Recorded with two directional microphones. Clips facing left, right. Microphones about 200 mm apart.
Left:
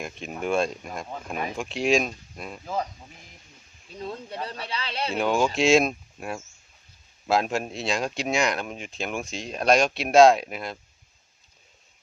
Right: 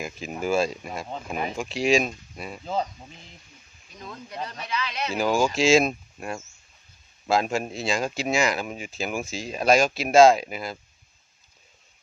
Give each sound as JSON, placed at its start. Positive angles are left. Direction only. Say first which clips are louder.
{"t": 0.0, "sound": "speech", "louder": "right 1 dB", "side_deg": 0}
{"t": 2.6, "sound": "speech", "louder": "right 2 dB", "side_deg": -25}
{"t": 3.8, "sound": "speech", "louder": "left 6 dB", "side_deg": 30}
{"t": 5.1, "sound": "speech", "louder": "right 1 dB", "side_deg": 0}